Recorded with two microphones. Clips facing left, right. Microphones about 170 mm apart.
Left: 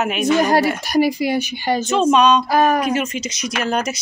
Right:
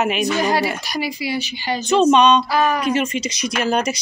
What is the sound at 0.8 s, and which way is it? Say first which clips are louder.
A woman's voice: left 8 dB; 50° left (ahead or behind).